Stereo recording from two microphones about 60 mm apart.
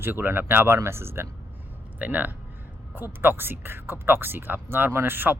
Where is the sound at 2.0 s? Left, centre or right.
Right.